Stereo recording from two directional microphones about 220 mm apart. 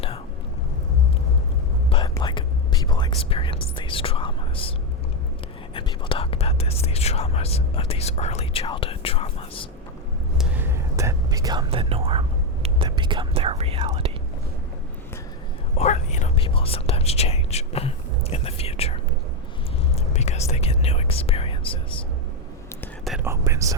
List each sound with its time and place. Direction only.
1.9 s whispering: 15° left (ahead or behind)
5.7 s speech: 25° left (ahead or behind)
10.3 s whispering: 5° right (ahead or behind); by 12.2 s 25° right (ahead or behind)
12.6 s speech: 20° right (ahead or behind)
15.8 s speech: 30° left (ahead or behind)
20.0 s whispering: 30° left (ahead or behind)
22.8 s whispering: centre (ahead or behind)
23.2 s speech: 15° right (ahead or behind)